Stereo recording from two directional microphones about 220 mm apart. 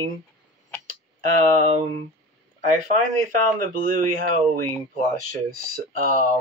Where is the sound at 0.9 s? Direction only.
35° right (ahead or behind).